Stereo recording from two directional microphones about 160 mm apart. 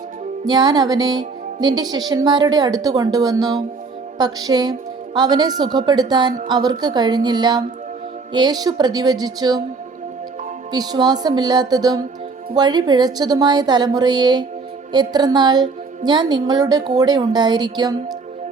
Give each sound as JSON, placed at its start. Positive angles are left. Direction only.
{"t": 0.4, "sound": "a woman's voice", "side_deg": -25}
{"t": 10.7, "sound": "a woman's voice", "side_deg": -25}